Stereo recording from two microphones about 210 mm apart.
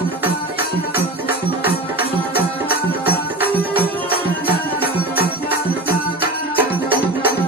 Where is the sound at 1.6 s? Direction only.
45° left (ahead or behind).